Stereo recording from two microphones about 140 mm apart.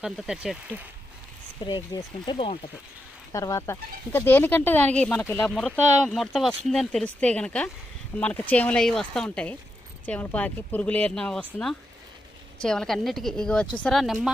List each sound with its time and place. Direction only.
0.0 s speech: 5° right (ahead or behind)
1.6 s speech: 30° left (ahead or behind)
5.5 s speech: centre (ahead or behind)
12.6 s speech: 5° left (ahead or behind)